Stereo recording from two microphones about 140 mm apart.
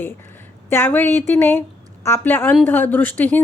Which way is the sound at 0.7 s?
15° left (ahead or behind).